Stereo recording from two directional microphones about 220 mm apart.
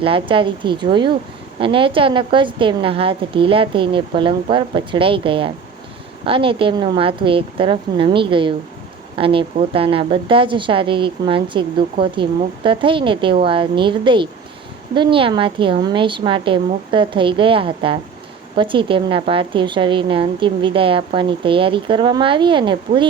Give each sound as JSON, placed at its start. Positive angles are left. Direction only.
{"t": 0.0, "sound": "a woman's voice", "side_deg": -25}